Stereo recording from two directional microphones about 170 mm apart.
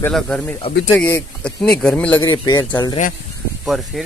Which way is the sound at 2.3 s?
25° left (ahead or behind).